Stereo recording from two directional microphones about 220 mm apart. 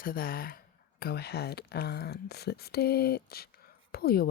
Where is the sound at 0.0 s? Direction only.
40° left (ahead or behind).